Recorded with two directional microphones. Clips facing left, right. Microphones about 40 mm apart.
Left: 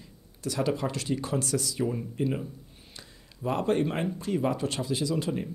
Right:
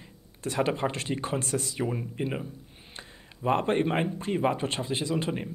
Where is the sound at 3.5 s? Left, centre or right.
Right.